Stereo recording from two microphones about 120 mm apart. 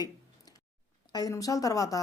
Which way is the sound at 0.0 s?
35° left (ahead or behind).